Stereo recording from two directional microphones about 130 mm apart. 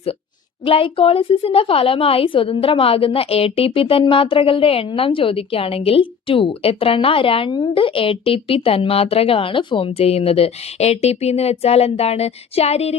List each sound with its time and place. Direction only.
0.6 s a woman's voice: 45° left (ahead or behind)